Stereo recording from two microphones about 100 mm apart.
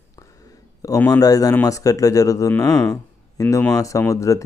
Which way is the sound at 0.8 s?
35° left (ahead or behind).